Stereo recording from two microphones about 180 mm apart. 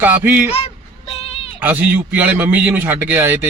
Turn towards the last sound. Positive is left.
turn(degrees=-10)  # may be behind; listen again after turning